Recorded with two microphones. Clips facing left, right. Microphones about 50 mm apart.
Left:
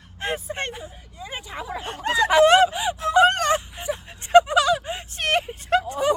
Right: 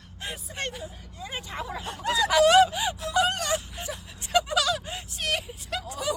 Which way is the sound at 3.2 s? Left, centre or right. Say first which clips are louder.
Left 8 dB; left.